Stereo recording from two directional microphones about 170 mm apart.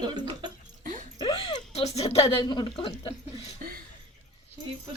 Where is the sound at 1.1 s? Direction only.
30° left (ahead or behind).